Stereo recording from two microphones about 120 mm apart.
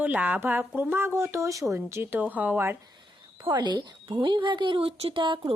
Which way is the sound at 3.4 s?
40° right (ahead or behind).